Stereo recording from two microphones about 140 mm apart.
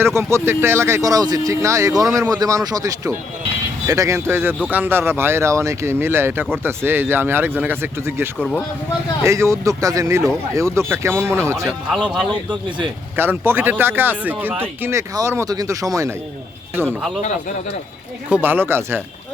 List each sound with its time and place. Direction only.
0.0 s speech: 20° right (ahead or behind)
8.4 s speech: 10° left (ahead or behind)
9.2 s speech: 20° right (ahead or behind)
12.3 s speech: 35° right (ahead or behind)
13.1 s speech: 15° right (ahead or behind)
18.4 s speech: 15° right (ahead or behind)